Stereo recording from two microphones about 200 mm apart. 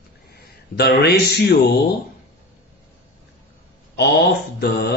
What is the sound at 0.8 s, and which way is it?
Speech, 55° left (ahead or behind).